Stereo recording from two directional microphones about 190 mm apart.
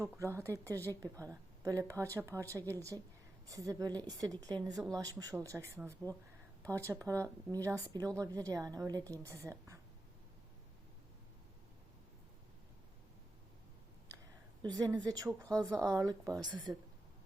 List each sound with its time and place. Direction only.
0.3 s a woman's voice: 15° right (ahead or behind)
14.6 s a woman's voice: 20° right (ahead or behind)